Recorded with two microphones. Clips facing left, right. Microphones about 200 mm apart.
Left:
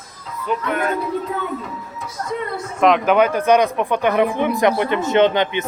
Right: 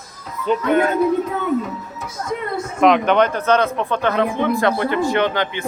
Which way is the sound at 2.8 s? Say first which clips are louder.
Even; centre (ahead or behind).